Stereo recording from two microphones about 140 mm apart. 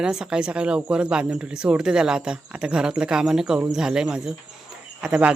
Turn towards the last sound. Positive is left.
turn(degrees=-10)  # may be behind; listen again after turning